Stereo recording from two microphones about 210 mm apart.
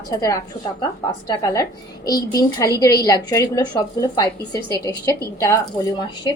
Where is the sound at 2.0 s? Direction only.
20° left (ahead or behind).